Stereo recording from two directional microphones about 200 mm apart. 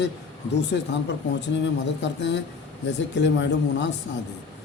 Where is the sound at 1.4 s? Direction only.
60° left (ahead or behind).